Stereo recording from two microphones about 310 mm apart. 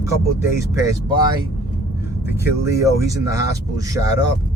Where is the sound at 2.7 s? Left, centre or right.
Centre.